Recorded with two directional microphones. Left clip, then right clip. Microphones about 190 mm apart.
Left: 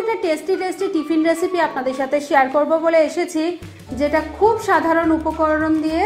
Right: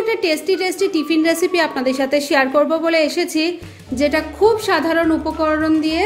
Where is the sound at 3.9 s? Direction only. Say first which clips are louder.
Right 1 dB; 25° right (ahead or behind).